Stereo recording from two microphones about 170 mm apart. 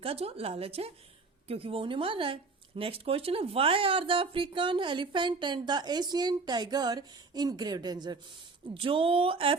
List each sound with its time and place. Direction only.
0.0 s a woman's voice: 35° right (ahead or behind)